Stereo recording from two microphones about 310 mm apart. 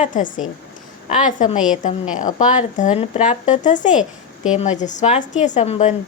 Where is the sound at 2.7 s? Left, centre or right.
Left.